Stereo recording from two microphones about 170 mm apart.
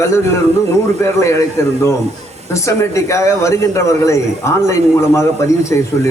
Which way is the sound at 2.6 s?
15° left (ahead or behind).